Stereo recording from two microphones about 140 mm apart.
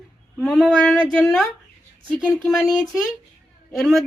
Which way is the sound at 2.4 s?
25° left (ahead or behind).